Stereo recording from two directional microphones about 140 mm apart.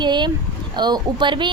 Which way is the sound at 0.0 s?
35° right (ahead or behind).